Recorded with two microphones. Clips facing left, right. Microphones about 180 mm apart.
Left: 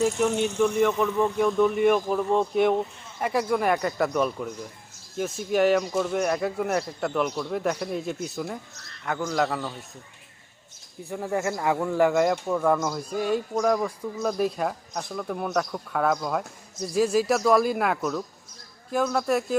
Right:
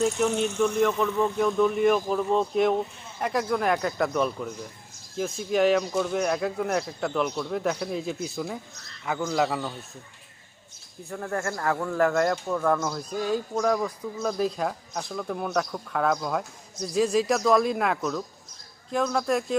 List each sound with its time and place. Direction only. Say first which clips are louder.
0.0 s speech: left 1 dB; 5° left (ahead or behind)
11.1 s speech: left 3 dB; 10° left (ahead or behind)
13.1 s speech: left 2 dB; 65° left (ahead or behind)
13.5 s speech: left 1 dB; centre (ahead or behind)